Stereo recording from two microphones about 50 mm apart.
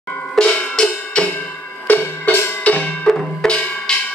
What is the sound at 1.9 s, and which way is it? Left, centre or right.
Music, left.